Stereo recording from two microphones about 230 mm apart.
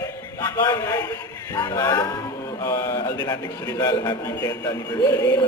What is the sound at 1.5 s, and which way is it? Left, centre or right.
Music, centre.